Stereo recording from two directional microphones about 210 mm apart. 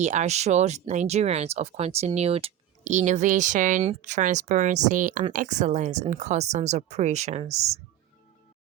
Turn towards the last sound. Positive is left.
turn(degrees=-30)  # may be behind; listen again after turning